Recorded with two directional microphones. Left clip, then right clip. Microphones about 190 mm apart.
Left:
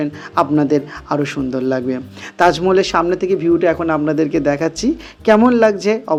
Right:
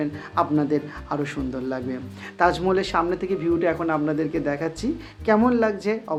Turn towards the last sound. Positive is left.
turn(degrees=40)  # may be behind; listen again after turning